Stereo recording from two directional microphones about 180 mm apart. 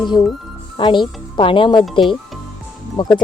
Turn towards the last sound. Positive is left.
turn(degrees=25)  # may be behind; listen again after turning